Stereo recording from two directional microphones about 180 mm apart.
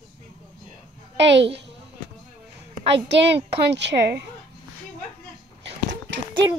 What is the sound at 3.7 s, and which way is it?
Speech, 70° right (ahead or behind).